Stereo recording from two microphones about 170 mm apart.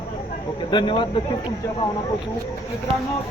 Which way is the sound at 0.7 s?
30° left (ahead or behind).